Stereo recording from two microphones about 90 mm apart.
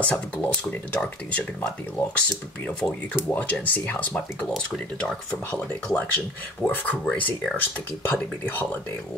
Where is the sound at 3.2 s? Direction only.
15° left (ahead or behind).